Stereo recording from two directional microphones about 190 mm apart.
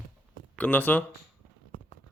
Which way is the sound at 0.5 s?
10° left (ahead or behind).